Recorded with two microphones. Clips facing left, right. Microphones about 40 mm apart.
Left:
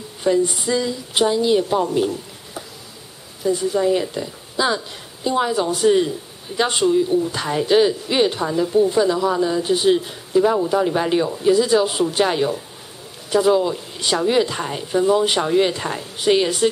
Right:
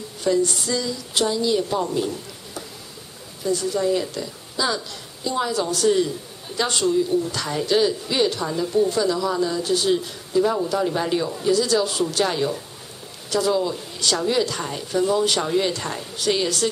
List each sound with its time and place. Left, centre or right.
0.2 s a woman's voice: left